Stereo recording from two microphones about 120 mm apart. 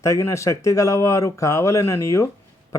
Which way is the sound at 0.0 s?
25° left (ahead or behind).